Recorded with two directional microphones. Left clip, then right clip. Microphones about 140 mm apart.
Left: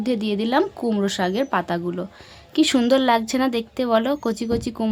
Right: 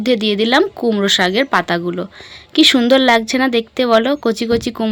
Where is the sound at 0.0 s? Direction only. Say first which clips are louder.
Right 9 dB; 20° right (ahead or behind).